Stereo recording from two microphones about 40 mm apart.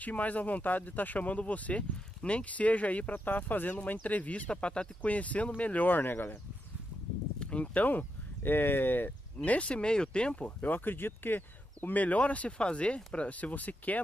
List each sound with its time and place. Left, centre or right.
0.0 s speech: left
4.5 s speech: left
5.0 s speech: left
7.3 s speech: left
9.4 s speech: left
10.7 s speech: left